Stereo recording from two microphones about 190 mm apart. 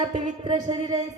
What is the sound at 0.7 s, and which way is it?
Speech, 20° right (ahead or behind).